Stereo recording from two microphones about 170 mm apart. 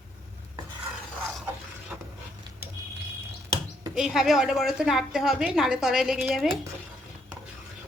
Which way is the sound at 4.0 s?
Centre (ahead or behind).